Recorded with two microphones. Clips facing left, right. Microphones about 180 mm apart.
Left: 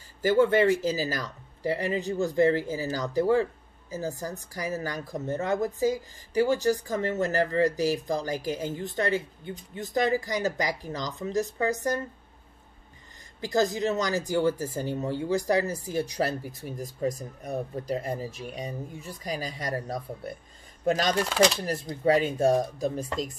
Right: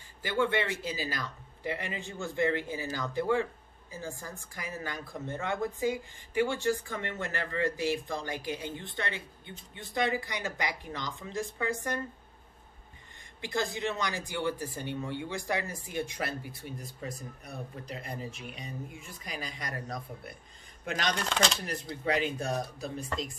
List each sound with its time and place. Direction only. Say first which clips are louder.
0.2 s speech: left 9 dB; 40° left (ahead or behind)
13.4 s speech: left 7 dB; 40° left (ahead or behind)
21.3 s speech: left 8 dB; 5° left (ahead or behind)
21.6 s speech: left 8 dB; 40° left (ahead or behind)